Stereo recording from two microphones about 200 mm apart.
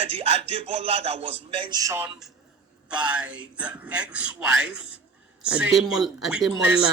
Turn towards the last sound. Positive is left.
turn(degrees=-5)  # may be behind; listen again after turning